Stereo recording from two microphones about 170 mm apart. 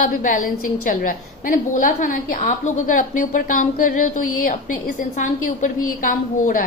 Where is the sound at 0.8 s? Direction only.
55° left (ahead or behind).